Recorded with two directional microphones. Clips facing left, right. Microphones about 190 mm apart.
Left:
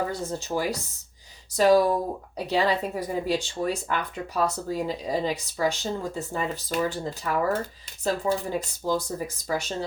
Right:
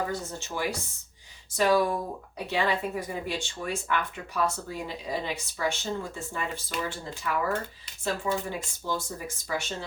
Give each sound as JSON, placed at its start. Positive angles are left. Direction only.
{"t": 0.1, "sound": "speech", "side_deg": 35}